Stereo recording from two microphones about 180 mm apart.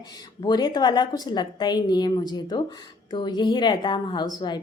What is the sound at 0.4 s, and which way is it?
A woman's voice, 25° left (ahead or behind).